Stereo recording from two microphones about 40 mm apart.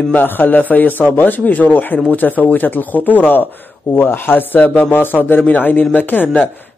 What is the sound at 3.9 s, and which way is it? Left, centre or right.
Speech, left.